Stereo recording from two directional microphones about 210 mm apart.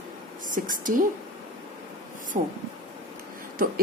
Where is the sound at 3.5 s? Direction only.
45° right (ahead or behind).